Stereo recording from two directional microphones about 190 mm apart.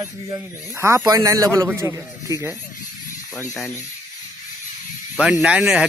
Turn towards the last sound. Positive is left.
turn(degrees=-5)  # may be behind; listen again after turning